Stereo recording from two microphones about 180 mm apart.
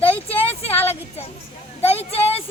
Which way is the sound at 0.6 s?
35° left (ahead or behind).